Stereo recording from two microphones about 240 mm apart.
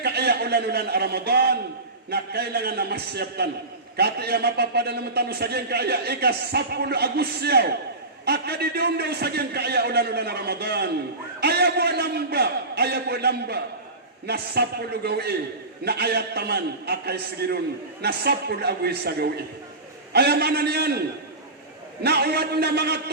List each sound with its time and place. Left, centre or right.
0.0 s a man's voice: right
22.0 s a man's voice: right